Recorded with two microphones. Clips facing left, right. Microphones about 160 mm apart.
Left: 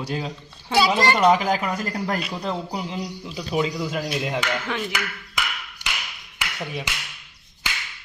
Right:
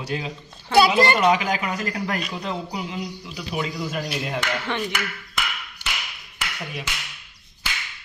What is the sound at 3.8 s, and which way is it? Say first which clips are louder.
Speech: left 2 dB; 15° left (ahead or behind).